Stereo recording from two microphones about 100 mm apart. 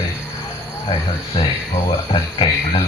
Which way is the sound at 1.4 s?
65° left (ahead or behind).